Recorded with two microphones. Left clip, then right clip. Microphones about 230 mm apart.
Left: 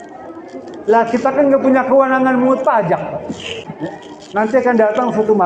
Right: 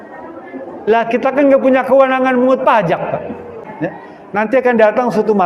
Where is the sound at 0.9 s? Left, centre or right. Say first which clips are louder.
Even; right.